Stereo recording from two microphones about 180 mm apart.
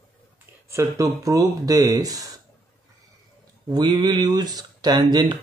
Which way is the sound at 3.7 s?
25° right (ahead or behind).